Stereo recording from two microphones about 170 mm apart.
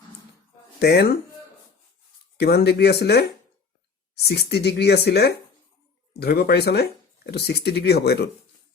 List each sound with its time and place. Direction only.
0.8 s speech: 70° left (ahead or behind)
2.4 s speech: 70° left (ahead or behind)